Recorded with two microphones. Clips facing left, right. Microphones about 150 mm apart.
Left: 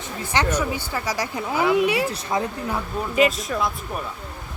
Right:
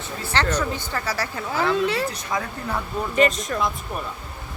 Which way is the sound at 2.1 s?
25° left (ahead or behind).